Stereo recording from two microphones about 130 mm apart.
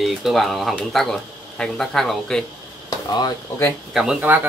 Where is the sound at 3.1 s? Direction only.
30° left (ahead or behind).